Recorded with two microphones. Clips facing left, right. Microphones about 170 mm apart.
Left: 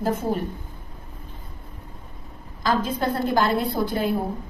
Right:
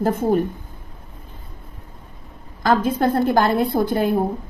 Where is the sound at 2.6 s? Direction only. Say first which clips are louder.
Right 5 dB; 55° right (ahead or behind).